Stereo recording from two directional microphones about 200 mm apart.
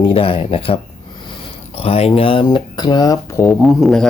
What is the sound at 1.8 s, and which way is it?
Speech, 30° left (ahead or behind).